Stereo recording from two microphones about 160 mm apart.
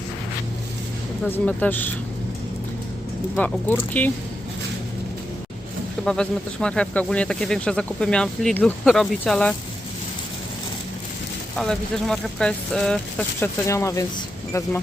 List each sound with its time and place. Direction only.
1.2 s speech: 10° left (ahead or behind)
3.3 s speech: 10° left (ahead or behind)
6.1 s speech: 5° left (ahead or behind)
11.5 s speech: 5° left (ahead or behind)
13.7 s speech: 20° left (ahead or behind)